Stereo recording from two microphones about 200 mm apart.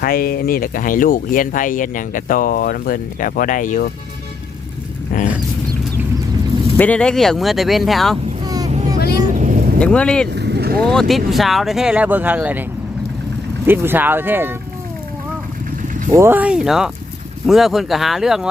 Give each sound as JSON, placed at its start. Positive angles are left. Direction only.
{"t": 0.0, "sound": "speech", "side_deg": 45}
{"t": 5.1, "sound": "a sound", "side_deg": 45}
{"t": 6.7, "sound": "speech", "side_deg": 5}
{"t": 8.4, "sound": "vehicle", "side_deg": -20}
{"t": 9.3, "sound": "vehicle", "side_deg": -40}
{"t": 9.7, "sound": "speech", "side_deg": 5}
{"t": 10.3, "sound": "vehicle", "side_deg": -55}
{"t": 10.8, "sound": "speech", "side_deg": 5}
{"t": 13.7, "sound": "speech", "side_deg": -10}
{"t": 16.0, "sound": "speech", "side_deg": -15}